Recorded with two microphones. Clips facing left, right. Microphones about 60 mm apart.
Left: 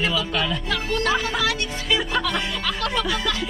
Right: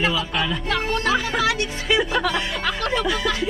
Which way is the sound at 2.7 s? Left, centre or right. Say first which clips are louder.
Right 1 dB; centre.